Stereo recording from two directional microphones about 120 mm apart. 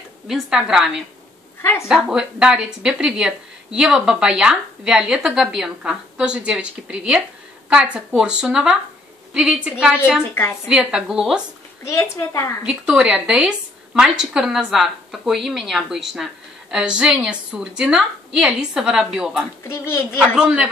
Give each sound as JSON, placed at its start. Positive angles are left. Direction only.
{"t": 0.3, "sound": "speech", "side_deg": -5}
{"t": 1.6, "sound": "a woman's voice", "side_deg": 20}
{"t": 1.9, "sound": "a woman's voice", "side_deg": -5}
{"t": 10.4, "sound": "a woman's voice", "side_deg": 20}
{"t": 10.7, "sound": "speech", "side_deg": -5}
{"t": 11.8, "sound": "a woman's voice", "side_deg": 25}
{"t": 12.6, "sound": "speech", "side_deg": -10}
{"t": 19.7, "sound": "a woman's voice", "side_deg": 20}
{"t": 20.3, "sound": "a woman's voice", "side_deg": -10}